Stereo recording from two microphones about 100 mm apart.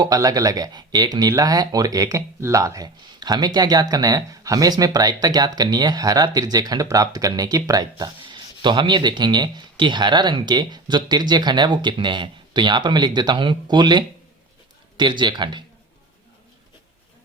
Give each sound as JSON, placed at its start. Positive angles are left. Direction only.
{"t": 0.0, "sound": "speech", "side_deg": -35}